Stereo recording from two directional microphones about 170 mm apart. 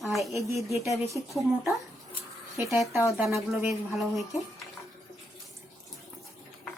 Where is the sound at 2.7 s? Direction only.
Centre (ahead or behind).